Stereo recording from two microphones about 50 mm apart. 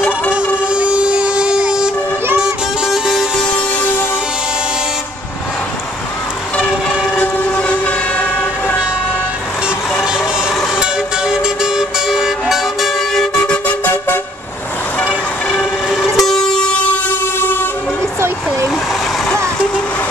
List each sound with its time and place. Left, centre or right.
0.3 s vehicle: right
2.4 s music: centre
7.5 s vehicle: left
10.8 s vehicle: centre
15.5 s train: centre